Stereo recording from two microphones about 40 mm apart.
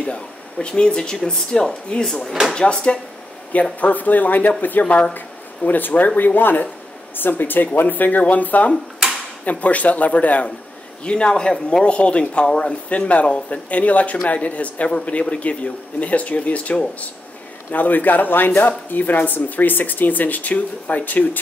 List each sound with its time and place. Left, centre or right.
0.0 s speech: left
3.8 s speech: left
5.7 s a woman's voice: left
11.1 s a man's voice: left
17.6 s speech: left